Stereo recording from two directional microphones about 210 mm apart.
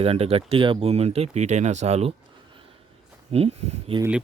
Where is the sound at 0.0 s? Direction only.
30° right (ahead or behind).